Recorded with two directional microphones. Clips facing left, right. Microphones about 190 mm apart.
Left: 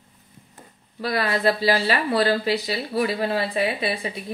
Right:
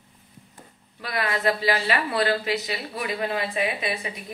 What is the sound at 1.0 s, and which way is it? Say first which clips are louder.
Speech: left 4 dB; 35° left (ahead or behind).